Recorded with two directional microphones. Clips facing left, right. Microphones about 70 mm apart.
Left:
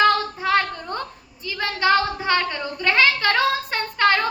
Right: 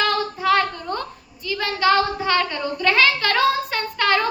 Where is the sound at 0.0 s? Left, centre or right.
Left.